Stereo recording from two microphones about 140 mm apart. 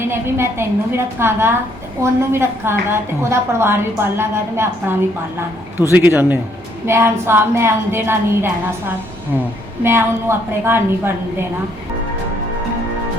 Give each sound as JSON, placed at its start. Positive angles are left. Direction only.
{"t": 0.0, "sound": "a woman's voice", "side_deg": -20}
{"t": 9.8, "sound": "a woman's voice", "side_deg": -15}